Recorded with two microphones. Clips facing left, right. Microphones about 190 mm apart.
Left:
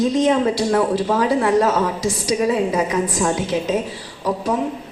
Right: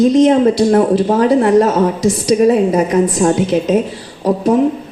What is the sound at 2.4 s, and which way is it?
Speech, 40° right (ahead or behind).